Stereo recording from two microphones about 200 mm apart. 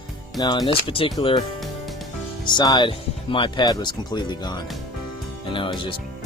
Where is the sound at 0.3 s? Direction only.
20° left (ahead or behind).